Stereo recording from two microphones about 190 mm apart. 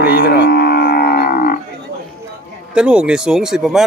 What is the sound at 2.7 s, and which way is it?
Speech, 5° right (ahead or behind).